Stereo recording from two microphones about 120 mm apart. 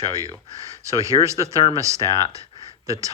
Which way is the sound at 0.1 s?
30° right (ahead or behind).